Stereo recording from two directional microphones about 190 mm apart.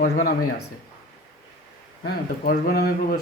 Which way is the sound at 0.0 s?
45° left (ahead or behind).